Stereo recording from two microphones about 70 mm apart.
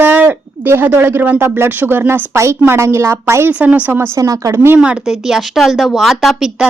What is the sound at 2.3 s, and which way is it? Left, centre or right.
Speech, right.